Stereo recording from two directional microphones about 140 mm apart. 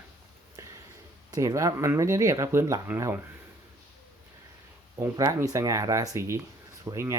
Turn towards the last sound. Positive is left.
turn(degrees=-20)  # may be behind; listen again after turning